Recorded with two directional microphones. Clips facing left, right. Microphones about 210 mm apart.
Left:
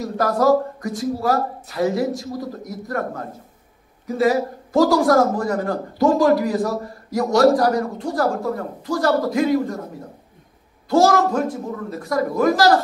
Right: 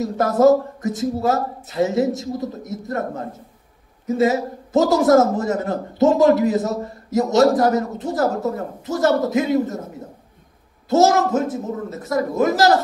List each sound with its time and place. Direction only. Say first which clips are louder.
0.0 s a man's voice: right 4 dB; 25° right (ahead or behind)
4.2 s a man's voice: left 1 dB; 25° right (ahead or behind)
10.9 s a man's voice: even; 20° right (ahead or behind)